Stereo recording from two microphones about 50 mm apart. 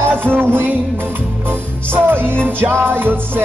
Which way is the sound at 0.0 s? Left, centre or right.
Right.